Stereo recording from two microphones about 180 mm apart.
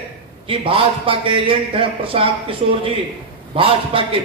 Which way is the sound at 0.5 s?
30° right (ahead or behind).